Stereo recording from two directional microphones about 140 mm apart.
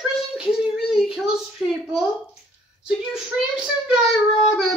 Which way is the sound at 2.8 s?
5° right (ahead or behind).